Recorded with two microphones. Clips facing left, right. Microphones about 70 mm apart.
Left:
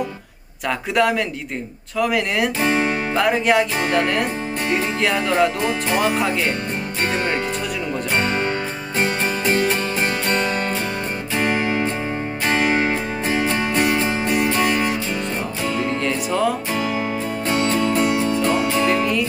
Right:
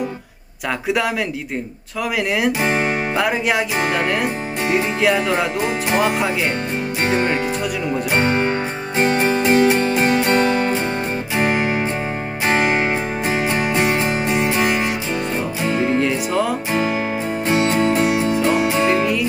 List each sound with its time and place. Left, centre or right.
0.9 s speech: centre
2.6 s speech: centre
3.2 s speech: centre
9.2 s music: centre
12.5 s music: right
13.2 s music: centre
16.0 s music: centre
17.5 s music: centre